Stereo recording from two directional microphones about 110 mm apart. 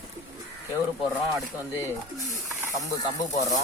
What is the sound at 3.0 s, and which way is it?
Speech, 30° left (ahead or behind).